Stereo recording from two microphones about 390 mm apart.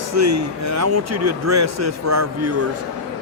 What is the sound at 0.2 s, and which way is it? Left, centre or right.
A man's voice, right.